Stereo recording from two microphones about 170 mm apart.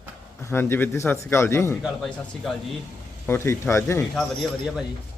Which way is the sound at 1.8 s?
Centre (ahead or behind).